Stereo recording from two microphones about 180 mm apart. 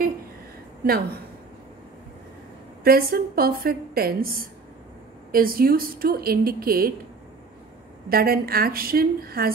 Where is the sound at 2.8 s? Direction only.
55° right (ahead or behind).